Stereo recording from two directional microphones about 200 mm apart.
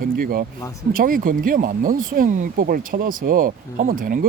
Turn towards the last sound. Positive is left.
turn(degrees=-45)  # may be behind; listen again after turning